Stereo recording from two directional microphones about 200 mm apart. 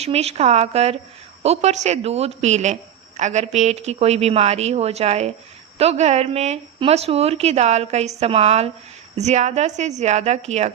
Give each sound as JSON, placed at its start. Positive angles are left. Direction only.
{"t": 0.0, "sound": "speech", "side_deg": -30}